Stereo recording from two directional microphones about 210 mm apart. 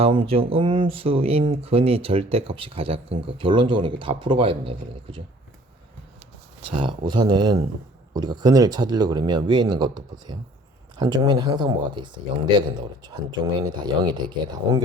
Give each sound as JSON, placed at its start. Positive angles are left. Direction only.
{"t": 0.0, "sound": "speech", "side_deg": -25}
{"t": 6.7, "sound": "speech", "side_deg": -20}